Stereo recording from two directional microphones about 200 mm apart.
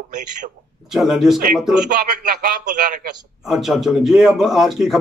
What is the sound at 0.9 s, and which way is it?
Speech, centre (ahead or behind).